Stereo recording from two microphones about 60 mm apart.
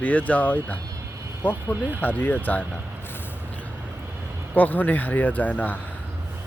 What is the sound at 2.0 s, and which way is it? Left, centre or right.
Speech, left.